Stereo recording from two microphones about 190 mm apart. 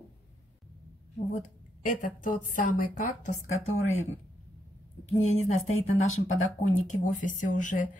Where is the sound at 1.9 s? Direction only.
40° left (ahead or behind).